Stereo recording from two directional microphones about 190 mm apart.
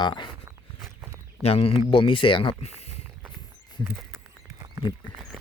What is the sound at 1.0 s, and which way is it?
Walk, 15° right (ahead or behind).